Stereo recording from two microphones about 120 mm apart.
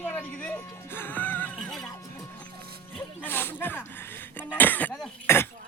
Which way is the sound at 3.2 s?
15° left (ahead or behind).